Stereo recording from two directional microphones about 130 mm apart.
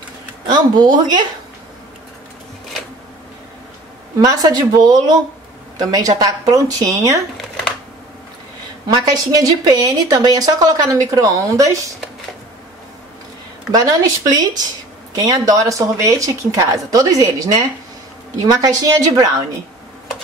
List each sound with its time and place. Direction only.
0.5 s speech: 35° right (ahead or behind)
4.2 s speech: 30° right (ahead or behind)
8.8 s speech: 30° right (ahead or behind)
13.7 s speech: 30° right (ahead or behind)